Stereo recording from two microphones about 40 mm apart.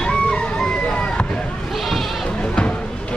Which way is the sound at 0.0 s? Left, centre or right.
Left.